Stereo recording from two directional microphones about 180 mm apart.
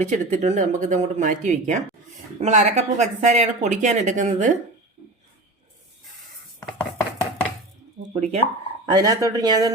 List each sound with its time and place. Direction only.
0.0 s speech: 40° right (ahead or behind)
8.1 s speech: 35° right (ahead or behind)
8.9 s speech: 20° right (ahead or behind)